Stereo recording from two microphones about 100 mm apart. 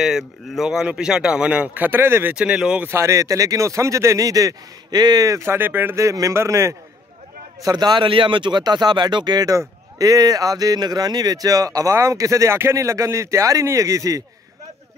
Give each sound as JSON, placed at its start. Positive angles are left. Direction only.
{"t": 0.0, "sound": "speech", "side_deg": -5}
{"t": 2.3, "sound": "speech", "side_deg": -10}
{"t": 2.9, "sound": "speech", "side_deg": -30}
{"t": 7.6, "sound": "speech", "side_deg": -45}